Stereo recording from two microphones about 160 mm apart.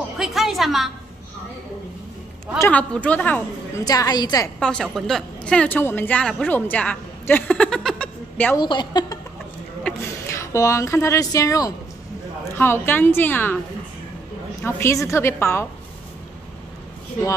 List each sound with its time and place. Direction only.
0.2 s music: centre (ahead or behind)
2.6 s a woman's voice: 10° left (ahead or behind)
3.8 s a woman's voice: 25° left (ahead or behind)
4.6 s speech: 5° left (ahead or behind)
8.5 s a woman's voice: 30° left (ahead or behind)
9.8 s a woman's voice: 15° left (ahead or behind)
14.6 s a woman's voice: 15° left (ahead or behind)